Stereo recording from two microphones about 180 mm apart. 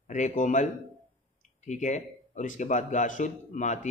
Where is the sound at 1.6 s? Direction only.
40° left (ahead or behind).